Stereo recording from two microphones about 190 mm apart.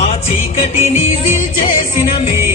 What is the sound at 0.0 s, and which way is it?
Music, 35° left (ahead or behind).